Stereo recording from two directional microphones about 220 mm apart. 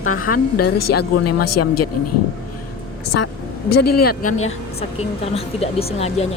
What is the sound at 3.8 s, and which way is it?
Speech, 90° left.